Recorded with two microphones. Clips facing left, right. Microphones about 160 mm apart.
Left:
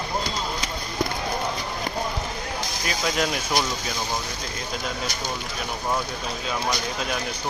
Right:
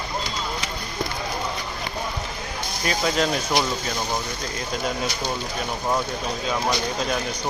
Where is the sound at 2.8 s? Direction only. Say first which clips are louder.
Right 4 dB; centre (ahead or behind).